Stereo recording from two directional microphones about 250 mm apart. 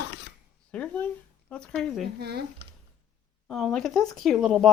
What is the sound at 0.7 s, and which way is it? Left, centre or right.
Speech, centre.